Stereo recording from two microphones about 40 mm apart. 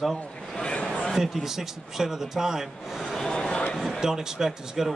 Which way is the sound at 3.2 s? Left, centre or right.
Centre.